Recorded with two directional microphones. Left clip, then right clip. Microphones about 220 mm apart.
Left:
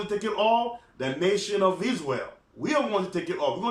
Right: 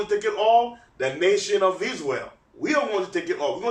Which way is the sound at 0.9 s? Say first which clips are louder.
Right 5 dB; 15° left (ahead or behind).